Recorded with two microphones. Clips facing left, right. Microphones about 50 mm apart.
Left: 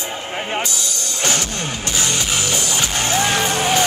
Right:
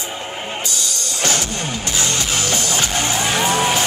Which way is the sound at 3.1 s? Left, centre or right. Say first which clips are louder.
Left 1 dB; centre.